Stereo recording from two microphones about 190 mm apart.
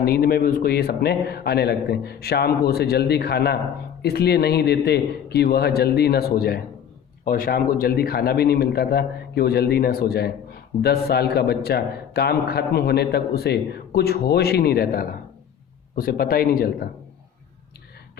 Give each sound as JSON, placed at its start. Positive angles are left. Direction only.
{"t": 0.0, "sound": "a man's voice", "side_deg": 55}